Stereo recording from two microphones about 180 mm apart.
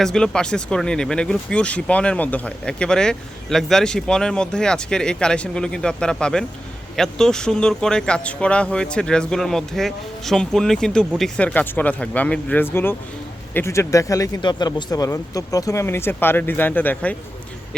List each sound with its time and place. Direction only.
0.0 s speech: 5° left (ahead or behind)